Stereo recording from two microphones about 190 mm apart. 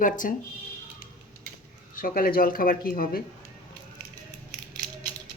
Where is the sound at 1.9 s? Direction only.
50° left (ahead or behind).